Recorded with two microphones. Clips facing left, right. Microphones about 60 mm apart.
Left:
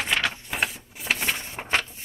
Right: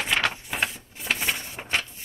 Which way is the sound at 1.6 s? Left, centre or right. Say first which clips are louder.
Left 3 dB; left.